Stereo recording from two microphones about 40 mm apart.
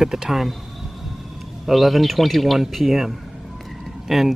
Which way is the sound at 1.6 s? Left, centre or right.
Centre.